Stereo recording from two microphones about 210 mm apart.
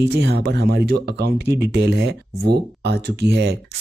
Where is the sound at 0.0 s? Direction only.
55° right (ahead or behind).